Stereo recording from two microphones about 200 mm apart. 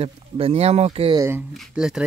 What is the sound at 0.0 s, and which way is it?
Speech, 30° right (ahead or behind).